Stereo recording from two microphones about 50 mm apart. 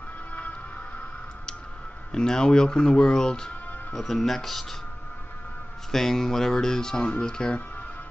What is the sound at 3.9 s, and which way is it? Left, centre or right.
Speech, centre.